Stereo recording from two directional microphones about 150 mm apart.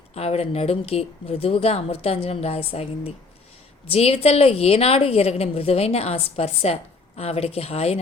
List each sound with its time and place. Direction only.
0.1 s speech: 45° left (ahead or behind)